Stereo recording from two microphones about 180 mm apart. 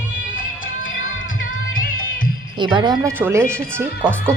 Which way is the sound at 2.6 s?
25° right (ahead or behind).